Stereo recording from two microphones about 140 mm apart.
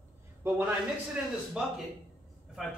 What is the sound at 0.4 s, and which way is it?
A man's voice, 15° right (ahead or behind).